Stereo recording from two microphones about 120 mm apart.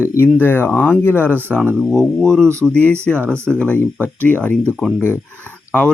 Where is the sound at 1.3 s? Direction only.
15° right (ahead or behind).